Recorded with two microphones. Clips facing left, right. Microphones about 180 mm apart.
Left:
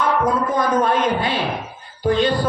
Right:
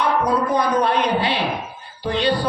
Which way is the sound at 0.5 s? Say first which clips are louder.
Left 1 dB; 45° left (ahead or behind).